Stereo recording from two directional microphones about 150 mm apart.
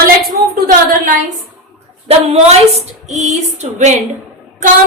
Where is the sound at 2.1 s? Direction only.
45° right (ahead or behind).